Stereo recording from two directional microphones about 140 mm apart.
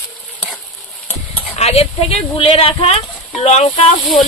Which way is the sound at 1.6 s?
50° left (ahead or behind).